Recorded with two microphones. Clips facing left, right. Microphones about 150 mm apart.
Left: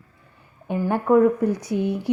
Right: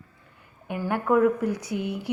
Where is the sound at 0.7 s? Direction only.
20° left (ahead or behind).